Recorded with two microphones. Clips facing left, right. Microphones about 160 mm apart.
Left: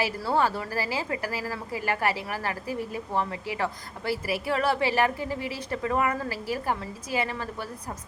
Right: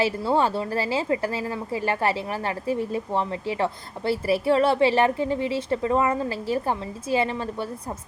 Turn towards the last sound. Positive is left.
turn(degrees=-25)  # may be behind; listen again after turning